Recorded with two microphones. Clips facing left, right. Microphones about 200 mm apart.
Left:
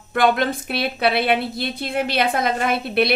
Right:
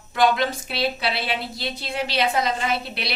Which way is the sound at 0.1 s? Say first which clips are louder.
Left 2 dB; 55° left (ahead or behind).